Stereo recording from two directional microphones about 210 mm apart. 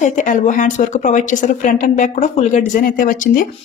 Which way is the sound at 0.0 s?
35° left (ahead or behind).